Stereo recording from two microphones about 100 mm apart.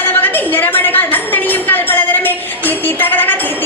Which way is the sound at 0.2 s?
20° left (ahead or behind).